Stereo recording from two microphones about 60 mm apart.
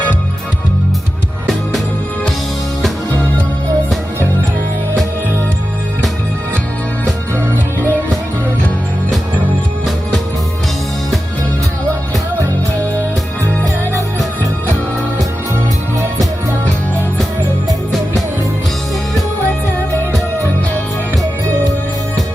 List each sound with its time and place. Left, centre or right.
7.5 s music: right